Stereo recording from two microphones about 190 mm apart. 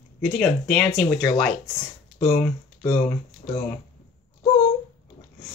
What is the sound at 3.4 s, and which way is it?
Speech, 40° left (ahead or behind).